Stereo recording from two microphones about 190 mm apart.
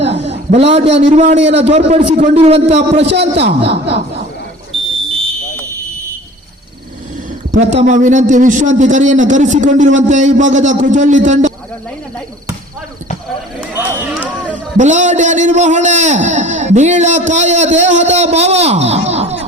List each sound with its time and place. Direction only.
0.1 s a sound: 35° right (ahead or behind)
1.1 s a man's voice: 35° right (ahead or behind)
3.1 s a woman's voice: 60° right (ahead or behind)
7.5 s a man's voice: 35° right (ahead or behind)
13.6 s a sound: 5° right (ahead or behind)
14.8 s a man's voice: 40° right (ahead or behind)